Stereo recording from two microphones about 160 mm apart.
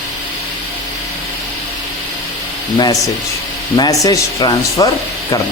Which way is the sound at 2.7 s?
25° left (ahead or behind).